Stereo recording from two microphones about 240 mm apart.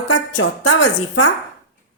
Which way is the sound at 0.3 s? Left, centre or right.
Left.